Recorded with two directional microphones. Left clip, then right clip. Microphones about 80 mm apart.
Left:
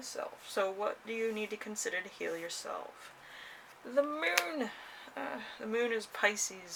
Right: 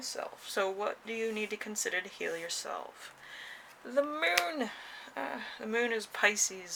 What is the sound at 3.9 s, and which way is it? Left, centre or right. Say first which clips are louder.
Speech: right 1 dB; right.